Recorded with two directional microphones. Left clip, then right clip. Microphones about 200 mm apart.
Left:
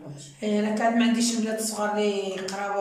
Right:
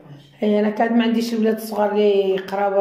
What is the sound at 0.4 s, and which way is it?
Speech, 35° right (ahead or behind).